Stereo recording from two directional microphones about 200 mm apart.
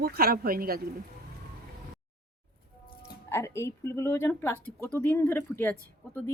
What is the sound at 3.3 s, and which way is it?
Speech, 15° left (ahead or behind).